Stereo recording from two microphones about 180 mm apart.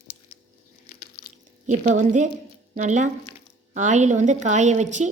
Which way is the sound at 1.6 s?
45° right (ahead or behind).